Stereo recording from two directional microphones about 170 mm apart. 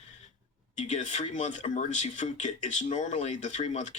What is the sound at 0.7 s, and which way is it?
Speech, 45° left (ahead or behind).